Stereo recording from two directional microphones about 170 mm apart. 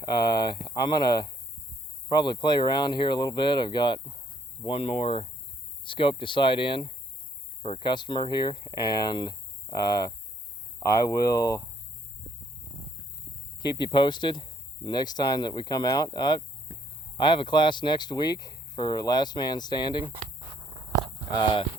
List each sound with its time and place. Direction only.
0.1 s speech: 25° left (ahead or behind)
2.2 s speech: 25° left (ahead or behind)
4.6 s cricket: 35° left (ahead or behind)
5.8 s speech: 30° left (ahead or behind)
11.3 s speech: 20° left (ahead or behind)
13.6 s speech: 25° left (ahead or behind)
16.7 s a sound: 75° right (ahead or behind)
17.2 s speech: 25° left (ahead or behind)
21.3 s cricket: 30° left (ahead or behind)